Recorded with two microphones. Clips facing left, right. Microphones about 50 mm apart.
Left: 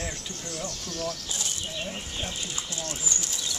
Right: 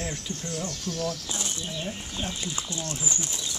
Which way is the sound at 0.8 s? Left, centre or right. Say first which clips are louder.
Right 3 dB; right.